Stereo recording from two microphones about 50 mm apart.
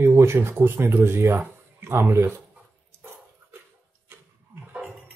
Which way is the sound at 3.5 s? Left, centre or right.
Right.